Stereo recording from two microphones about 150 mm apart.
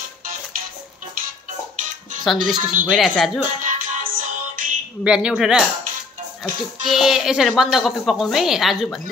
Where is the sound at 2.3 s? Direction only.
Centre (ahead or behind).